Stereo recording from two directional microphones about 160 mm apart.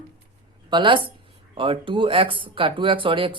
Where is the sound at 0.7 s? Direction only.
30° right (ahead or behind).